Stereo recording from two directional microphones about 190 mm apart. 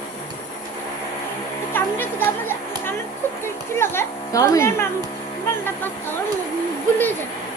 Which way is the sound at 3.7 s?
10° left (ahead or behind).